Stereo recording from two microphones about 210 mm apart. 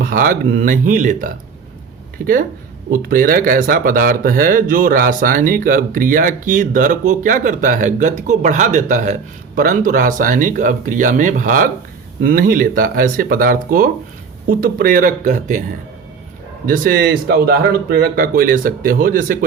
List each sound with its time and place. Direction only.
0.0 s a sound: 40° right (ahead or behind)
0.6 s speech: 40° right (ahead or behind)
16.6 s speech: 40° right (ahead or behind)